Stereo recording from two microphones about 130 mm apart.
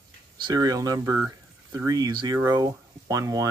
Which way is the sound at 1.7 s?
30° right (ahead or behind).